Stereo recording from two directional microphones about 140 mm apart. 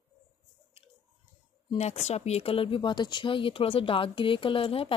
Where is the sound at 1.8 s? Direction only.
50° left (ahead or behind).